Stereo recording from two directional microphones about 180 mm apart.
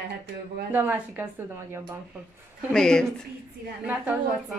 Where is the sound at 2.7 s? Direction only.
5° left (ahead or behind).